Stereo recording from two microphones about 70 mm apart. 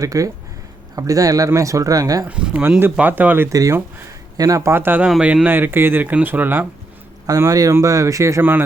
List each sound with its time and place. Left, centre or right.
0.0 s speech: right
2.2 s speech: centre
3.5 s speech: right
4.7 s speech: right
5.2 s speech: centre
5.5 s speech: right
7.3 s speech: right
8.4 s speech: right